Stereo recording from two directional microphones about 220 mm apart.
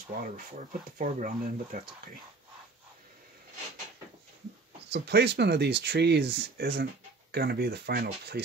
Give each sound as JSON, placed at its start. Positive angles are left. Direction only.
{"t": 0.2, "sound": "speech", "side_deg": -40}
{"t": 4.8, "sound": "speech", "side_deg": -50}